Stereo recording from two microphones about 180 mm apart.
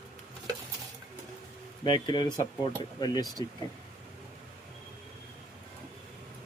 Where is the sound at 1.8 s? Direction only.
25° left (ahead or behind).